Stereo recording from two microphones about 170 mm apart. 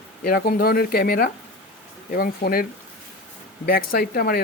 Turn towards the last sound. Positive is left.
turn(degrees=65)  # may be behind; listen again after turning